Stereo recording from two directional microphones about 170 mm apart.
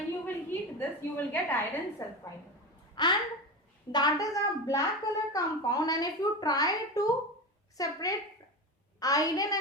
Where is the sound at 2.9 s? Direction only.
25° left (ahead or behind).